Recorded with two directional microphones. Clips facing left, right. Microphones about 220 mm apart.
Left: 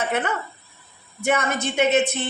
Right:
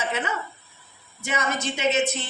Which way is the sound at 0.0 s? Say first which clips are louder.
Left 4 dB; 55° left (ahead or behind).